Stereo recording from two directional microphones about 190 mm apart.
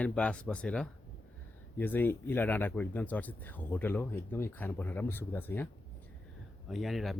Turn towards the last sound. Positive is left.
turn(degrees=0)  # may be behind; listen again after turning